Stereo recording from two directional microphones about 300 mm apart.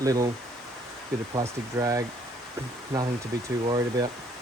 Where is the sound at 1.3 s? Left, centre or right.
Centre.